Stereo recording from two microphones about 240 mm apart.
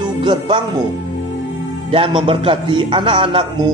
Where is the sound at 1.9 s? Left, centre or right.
Right.